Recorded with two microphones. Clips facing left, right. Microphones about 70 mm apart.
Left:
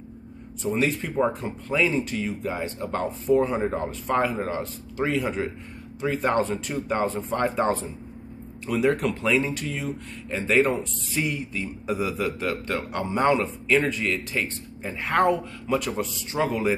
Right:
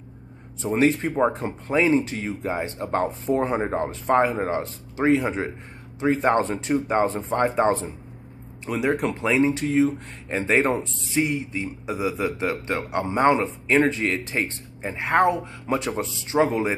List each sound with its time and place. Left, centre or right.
0.6 s a man's voice: right
11.8 s a man's voice: centre
15.6 s a man's voice: right